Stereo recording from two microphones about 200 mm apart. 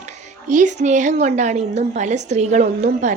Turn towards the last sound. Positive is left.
turn(degrees=-35)  # may be behind; listen again after turning